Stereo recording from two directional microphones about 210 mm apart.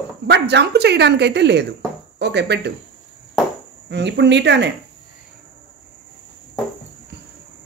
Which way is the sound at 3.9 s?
55° right (ahead or behind).